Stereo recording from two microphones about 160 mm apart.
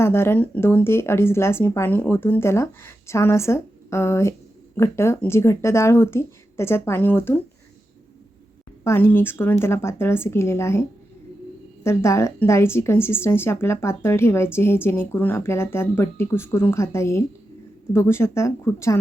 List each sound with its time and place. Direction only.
0.0 s a woman's voice: 15° left (ahead or behind)
8.8 s a woman's voice: 15° left (ahead or behind)